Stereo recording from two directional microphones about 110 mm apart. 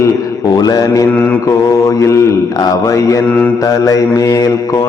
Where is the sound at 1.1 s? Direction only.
15° left (ahead or behind).